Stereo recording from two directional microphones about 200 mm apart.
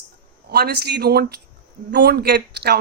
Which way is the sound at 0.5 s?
55° right (ahead or behind).